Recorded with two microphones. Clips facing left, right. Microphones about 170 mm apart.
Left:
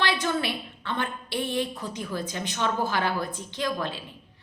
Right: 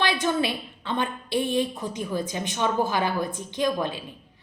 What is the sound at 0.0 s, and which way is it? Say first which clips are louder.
A woman's voice: right 2 dB; 20° right (ahead or behind).